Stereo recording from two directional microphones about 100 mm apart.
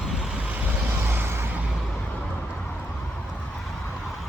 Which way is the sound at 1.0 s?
25° right (ahead or behind).